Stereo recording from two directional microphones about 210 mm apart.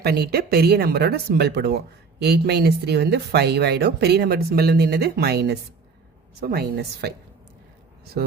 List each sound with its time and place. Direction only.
0.0 s speech: 50° right (ahead or behind)